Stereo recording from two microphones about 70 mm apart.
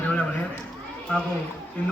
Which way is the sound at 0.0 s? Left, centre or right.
Left.